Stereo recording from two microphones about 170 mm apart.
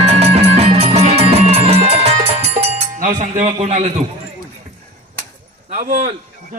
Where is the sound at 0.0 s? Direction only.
40° right (ahead or behind).